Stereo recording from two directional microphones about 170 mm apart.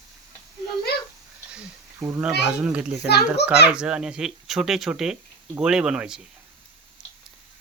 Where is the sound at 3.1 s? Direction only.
75° left (ahead or behind).